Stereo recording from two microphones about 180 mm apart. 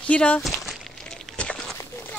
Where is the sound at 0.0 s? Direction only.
5° left (ahead or behind).